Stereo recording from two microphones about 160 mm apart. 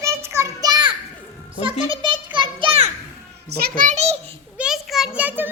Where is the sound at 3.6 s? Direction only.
55° right (ahead or behind).